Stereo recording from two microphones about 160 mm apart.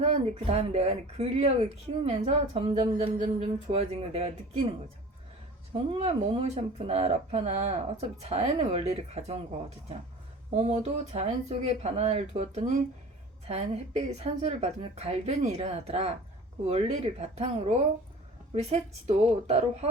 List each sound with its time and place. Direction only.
0.0 s speech: 45° right (ahead or behind)
5.7 s speech: 35° right (ahead or behind)
10.5 s speech: 40° right (ahead or behind)